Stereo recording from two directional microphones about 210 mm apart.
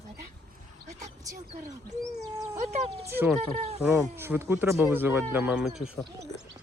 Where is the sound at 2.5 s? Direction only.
30° right (ahead or behind).